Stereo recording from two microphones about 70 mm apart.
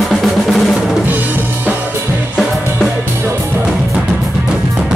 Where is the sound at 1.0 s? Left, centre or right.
Right.